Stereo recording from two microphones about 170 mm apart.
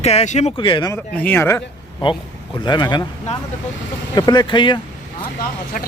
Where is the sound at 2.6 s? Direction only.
25° left (ahead or behind).